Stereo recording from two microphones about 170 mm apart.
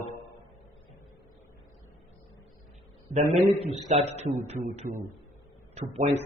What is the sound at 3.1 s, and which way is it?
A man's voice, 40° right (ahead or behind).